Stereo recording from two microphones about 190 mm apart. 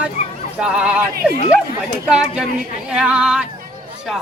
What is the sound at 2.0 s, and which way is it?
Speech, 5° right (ahead or behind).